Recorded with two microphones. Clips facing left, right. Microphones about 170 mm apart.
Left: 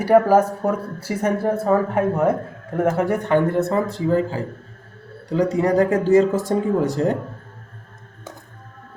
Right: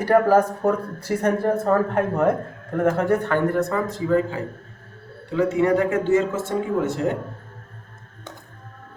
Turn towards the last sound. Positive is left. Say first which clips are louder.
# left 3 dB
turn(degrees=35)  # may be behind; listen again after turning